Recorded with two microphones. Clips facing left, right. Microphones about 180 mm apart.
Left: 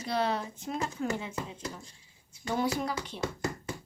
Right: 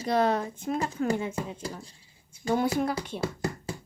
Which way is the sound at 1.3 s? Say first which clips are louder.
Right 4 dB; 30° right (ahead or behind).